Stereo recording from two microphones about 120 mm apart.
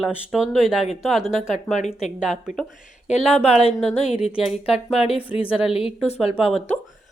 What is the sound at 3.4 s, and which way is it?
Speech, 60° left (ahead or behind).